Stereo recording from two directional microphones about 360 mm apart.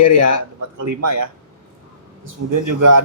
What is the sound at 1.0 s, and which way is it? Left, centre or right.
Speech, right.